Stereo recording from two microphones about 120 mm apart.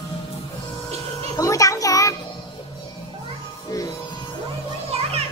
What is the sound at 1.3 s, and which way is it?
Music, 25° left (ahead or behind).